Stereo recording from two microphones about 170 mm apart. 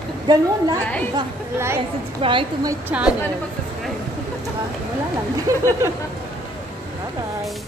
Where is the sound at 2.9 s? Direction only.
10° right (ahead or behind).